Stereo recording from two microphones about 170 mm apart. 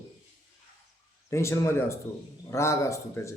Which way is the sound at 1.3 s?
15° left (ahead or behind).